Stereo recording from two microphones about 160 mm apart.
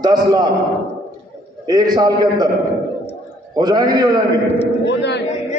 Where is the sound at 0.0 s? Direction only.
25° right (ahead or behind).